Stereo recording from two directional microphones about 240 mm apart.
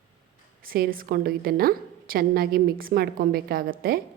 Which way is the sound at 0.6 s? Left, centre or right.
Right.